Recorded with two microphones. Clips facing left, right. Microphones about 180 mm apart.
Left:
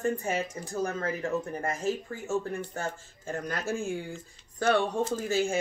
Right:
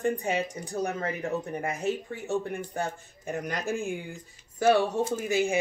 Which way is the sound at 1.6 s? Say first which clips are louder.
Right 1 dB; 65° right (ahead or behind).